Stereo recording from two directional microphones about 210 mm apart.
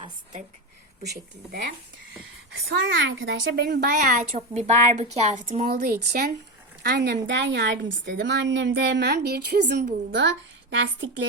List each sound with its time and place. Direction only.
1.0 s a woman's voice: 50° right (ahead or behind)
2.6 s a woman's voice: 60° right (ahead or behind); by 5.6 s 30° right (ahead or behind)
5.6 s a woman's voice: 45° right (ahead or behind); by 11.3 s 60° right (ahead or behind)